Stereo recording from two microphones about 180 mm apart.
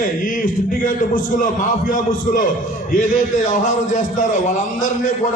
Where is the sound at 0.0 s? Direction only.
50° left (ahead or behind).